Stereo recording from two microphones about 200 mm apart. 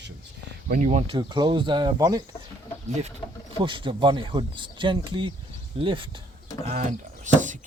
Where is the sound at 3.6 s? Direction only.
25° right (ahead or behind).